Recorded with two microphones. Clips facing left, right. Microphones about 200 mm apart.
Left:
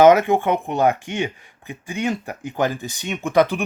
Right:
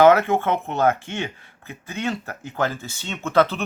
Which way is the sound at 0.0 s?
15° left (ahead or behind).